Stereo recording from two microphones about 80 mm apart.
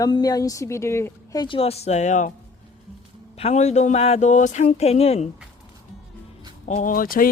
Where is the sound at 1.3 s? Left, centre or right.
Left.